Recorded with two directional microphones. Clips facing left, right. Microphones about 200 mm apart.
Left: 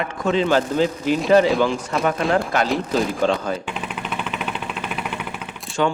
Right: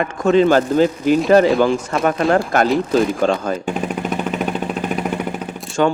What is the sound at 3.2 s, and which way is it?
Vehicle, 45° right (ahead or behind).